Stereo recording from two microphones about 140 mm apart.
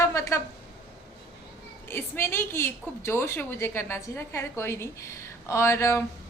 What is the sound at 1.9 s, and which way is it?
A woman's voice, 15° left (ahead or behind).